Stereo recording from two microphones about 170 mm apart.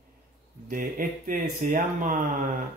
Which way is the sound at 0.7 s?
55° right (ahead or behind).